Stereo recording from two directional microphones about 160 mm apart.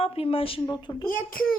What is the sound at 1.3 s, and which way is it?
Speech, 65° left (ahead or behind).